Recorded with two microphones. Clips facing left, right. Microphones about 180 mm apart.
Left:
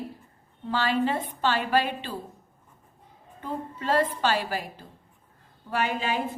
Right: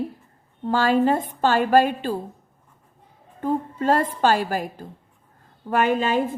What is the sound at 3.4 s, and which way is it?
A woman's voice, 45° right (ahead or behind).